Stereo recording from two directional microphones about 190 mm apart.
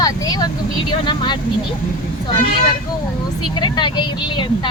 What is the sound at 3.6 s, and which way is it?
Speech, 25° left (ahead or behind).